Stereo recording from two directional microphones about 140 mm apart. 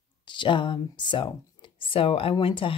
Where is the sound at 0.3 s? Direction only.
35° left (ahead or behind).